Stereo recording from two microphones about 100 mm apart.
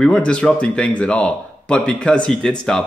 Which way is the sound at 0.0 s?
10° left (ahead or behind).